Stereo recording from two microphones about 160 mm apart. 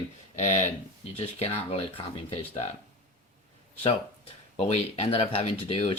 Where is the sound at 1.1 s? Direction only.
40° left (ahead or behind).